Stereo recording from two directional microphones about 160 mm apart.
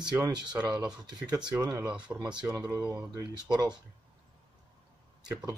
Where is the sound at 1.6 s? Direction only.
25° right (ahead or behind).